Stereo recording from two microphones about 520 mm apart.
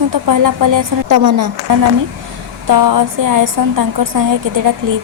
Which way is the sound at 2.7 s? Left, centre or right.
Right.